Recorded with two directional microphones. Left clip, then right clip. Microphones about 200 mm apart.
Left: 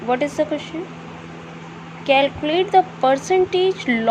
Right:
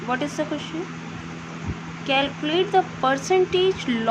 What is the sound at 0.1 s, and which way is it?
Speech, 20° left (ahead or behind).